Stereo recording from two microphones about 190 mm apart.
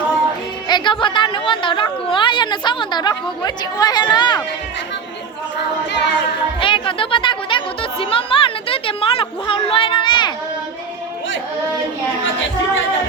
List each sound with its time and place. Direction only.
0.7 s a woman's voice: 25° left (ahead or behind)
5.9 s music: 65° left (ahead or behind)
6.6 s a woman's voice: 25° left (ahead or behind)
12.2 s speech: 85° left